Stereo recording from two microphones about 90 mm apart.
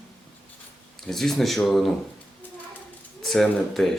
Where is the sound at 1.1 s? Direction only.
5° left (ahead or behind).